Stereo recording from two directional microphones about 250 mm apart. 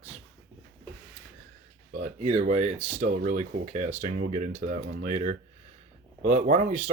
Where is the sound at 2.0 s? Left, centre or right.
Right.